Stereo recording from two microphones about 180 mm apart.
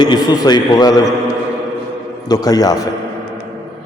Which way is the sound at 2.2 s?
20° left (ahead or behind).